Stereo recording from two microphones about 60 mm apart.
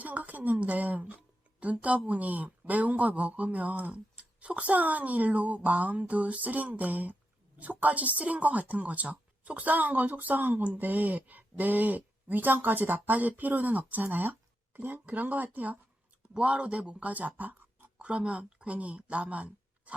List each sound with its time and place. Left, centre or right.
0.0 s a woman's voice: right